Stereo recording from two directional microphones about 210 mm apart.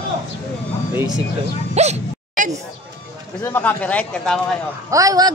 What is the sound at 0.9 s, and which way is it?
Speech, 20° right (ahead or behind).